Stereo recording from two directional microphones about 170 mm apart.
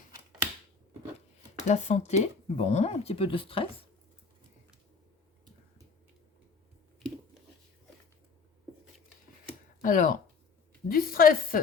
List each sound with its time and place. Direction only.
1.6 s speech: 40° left (ahead or behind)
9.8 s a woman's voice: 50° left (ahead or behind)